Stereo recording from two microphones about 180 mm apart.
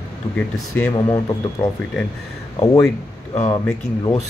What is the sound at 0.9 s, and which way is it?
Speech, 25° left (ahead or behind).